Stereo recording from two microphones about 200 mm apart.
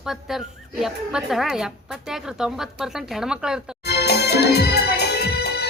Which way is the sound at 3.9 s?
55° left (ahead or behind).